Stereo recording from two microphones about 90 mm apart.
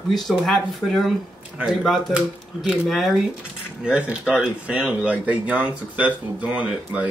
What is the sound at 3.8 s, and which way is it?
Speech, 15° right (ahead or behind).